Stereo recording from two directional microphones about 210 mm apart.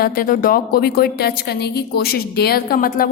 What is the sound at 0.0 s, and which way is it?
A woman's voice, 40° left (ahead or behind).